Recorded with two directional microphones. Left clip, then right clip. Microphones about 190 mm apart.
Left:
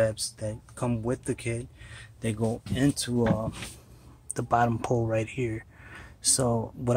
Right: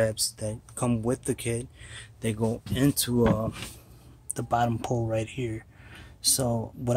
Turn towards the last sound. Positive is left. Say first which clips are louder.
# left 2 dB
turn(degrees=5)  # may be behind; listen again after turning